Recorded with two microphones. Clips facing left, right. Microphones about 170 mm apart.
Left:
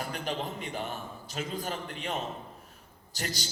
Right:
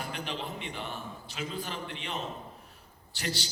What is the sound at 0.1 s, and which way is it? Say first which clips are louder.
A man's voice: left 3 dB; 40° left (ahead or behind).